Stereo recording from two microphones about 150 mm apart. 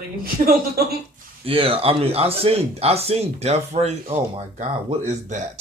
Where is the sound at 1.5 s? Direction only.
40° right (ahead or behind).